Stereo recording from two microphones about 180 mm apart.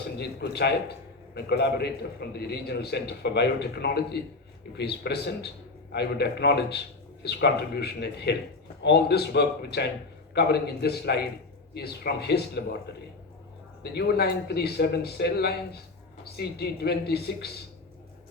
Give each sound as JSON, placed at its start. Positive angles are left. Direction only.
{"t": 0.2, "sound": "a man's voice", "side_deg": 65}
{"t": 13.9, "sound": "a man's voice", "side_deg": 65}